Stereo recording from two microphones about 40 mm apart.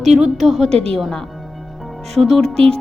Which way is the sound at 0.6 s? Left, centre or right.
Centre.